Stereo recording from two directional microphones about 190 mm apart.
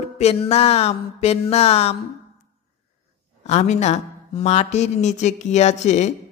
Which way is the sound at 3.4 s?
35° left (ahead or behind).